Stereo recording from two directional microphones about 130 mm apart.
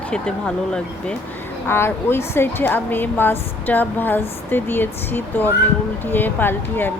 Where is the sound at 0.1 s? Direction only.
5° left (ahead or behind).